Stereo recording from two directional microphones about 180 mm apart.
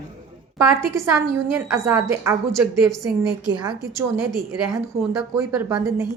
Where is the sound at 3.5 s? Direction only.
20° right (ahead or behind).